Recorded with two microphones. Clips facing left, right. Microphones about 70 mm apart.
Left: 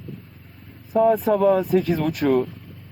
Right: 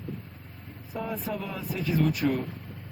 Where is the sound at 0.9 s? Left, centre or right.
Left.